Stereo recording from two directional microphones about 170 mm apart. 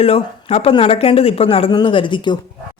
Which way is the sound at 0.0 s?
35° left (ahead or behind).